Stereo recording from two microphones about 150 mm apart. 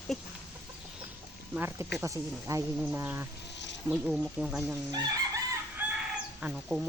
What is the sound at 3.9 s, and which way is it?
Speech, 5° right (ahead or behind).